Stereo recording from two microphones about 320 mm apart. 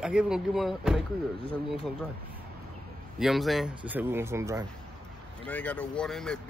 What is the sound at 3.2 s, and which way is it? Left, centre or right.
Speech, centre.